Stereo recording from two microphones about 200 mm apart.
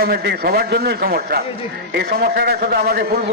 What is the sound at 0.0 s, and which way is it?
Speech, 50° right (ahead or behind).